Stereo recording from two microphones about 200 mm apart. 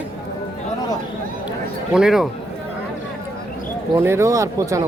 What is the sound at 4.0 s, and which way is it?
Speech, 15° right (ahead or behind).